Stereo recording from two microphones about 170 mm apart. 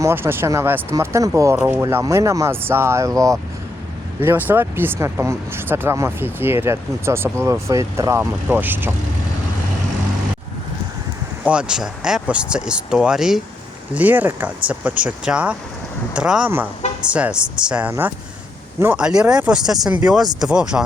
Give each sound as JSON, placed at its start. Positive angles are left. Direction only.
{"t": 0.0, "sound": "speech", "side_deg": -15}
{"t": 11.4, "sound": "speech", "side_deg": -5}